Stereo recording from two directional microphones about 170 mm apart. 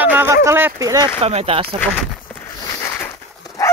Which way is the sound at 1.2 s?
35° right (ahead or behind).